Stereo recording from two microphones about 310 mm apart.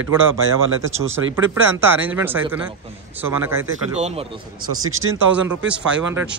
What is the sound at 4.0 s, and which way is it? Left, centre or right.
Speech, centre.